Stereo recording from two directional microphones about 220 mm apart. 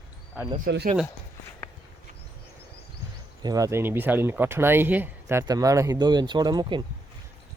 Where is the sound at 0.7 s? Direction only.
50° right (ahead or behind).